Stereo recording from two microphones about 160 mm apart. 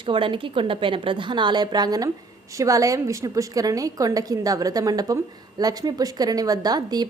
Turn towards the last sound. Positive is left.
turn(degrees=-25)  # may be behind; listen again after turning